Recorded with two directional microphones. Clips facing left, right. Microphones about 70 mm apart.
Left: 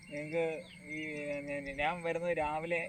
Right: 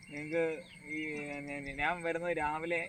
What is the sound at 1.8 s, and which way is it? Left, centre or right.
Speech, right.